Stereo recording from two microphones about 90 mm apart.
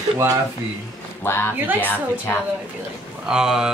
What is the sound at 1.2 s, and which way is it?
Speech, 25° left (ahead or behind).